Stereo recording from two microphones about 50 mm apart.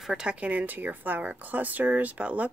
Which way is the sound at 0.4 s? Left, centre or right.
Right.